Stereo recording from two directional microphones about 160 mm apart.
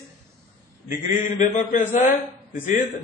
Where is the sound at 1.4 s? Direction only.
50° left (ahead or behind).